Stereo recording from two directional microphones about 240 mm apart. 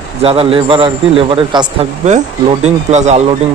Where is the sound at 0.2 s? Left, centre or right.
Right.